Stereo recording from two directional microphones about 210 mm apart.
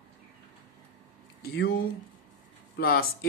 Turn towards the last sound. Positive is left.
turn(degrees=45)  # may be behind; listen again after turning